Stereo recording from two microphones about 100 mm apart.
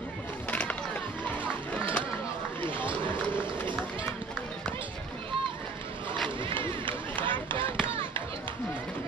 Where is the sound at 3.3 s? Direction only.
55° right (ahead or behind).